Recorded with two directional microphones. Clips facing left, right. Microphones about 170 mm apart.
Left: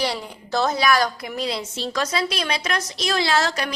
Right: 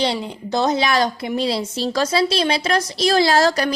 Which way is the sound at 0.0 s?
20° right (ahead or behind).